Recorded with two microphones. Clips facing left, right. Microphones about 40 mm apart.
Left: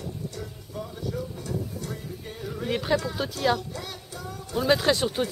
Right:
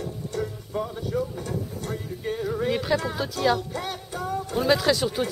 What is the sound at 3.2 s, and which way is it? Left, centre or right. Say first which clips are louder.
Speech: right 2 dB; centre.